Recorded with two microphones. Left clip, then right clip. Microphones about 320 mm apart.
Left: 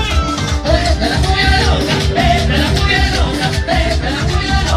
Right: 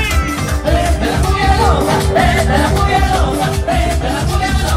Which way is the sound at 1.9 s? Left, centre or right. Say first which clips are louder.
Right 1 dB; centre.